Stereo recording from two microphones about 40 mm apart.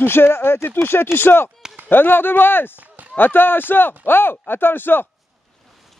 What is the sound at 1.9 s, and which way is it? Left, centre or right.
Speech, left.